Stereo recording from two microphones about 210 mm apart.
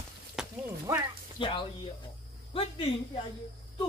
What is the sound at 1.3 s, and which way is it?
Speech, 25° left (ahead or behind).